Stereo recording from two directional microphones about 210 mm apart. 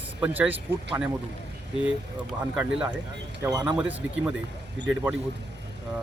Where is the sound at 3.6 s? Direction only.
5° right (ahead or behind).